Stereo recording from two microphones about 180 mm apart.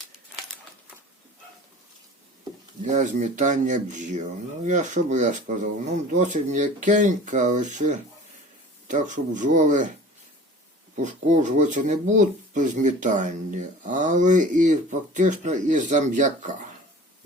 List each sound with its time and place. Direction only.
2.8 s speech: 45° right (ahead or behind)
10.9 s speech: 45° right (ahead or behind)